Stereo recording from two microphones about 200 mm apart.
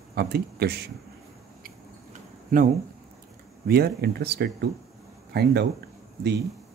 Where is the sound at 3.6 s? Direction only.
50° right (ahead or behind).